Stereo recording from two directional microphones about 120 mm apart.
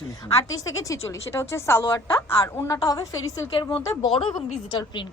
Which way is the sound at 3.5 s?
40° left (ahead or behind).